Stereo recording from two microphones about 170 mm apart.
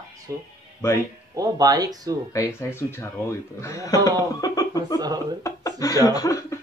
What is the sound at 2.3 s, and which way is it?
A man's voice, 15° left (ahead or behind).